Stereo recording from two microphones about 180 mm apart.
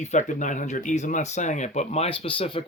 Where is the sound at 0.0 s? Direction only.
40° left (ahead or behind).